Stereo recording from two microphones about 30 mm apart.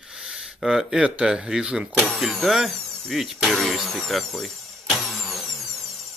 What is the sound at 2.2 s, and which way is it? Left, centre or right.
Speech, centre.